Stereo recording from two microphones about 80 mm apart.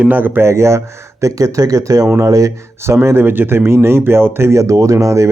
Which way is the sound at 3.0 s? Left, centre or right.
Right.